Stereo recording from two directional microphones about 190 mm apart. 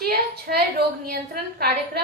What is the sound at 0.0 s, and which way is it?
A woman's voice, 55° right (ahead or behind).